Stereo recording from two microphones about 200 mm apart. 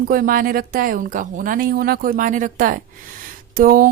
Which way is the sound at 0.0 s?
45° right (ahead or behind).